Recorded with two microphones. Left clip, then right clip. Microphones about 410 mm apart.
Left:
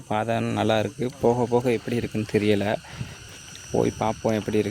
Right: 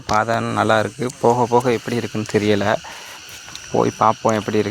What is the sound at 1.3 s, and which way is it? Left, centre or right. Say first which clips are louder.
Speech: right 7 dB; left.